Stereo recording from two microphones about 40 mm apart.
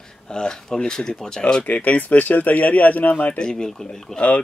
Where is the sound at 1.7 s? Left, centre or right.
Left.